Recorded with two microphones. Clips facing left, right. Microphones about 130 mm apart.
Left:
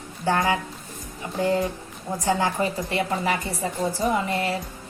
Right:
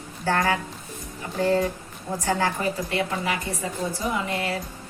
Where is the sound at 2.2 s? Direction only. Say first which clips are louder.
Left 2 dB; 20° left (ahead or behind).